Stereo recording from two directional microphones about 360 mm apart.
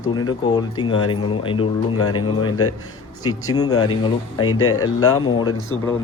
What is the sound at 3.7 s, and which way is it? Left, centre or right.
Speech, left.